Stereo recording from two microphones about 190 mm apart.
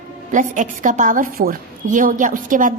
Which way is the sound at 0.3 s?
40° right (ahead or behind).